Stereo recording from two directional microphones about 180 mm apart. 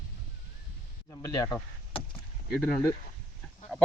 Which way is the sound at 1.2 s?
20° left (ahead or behind).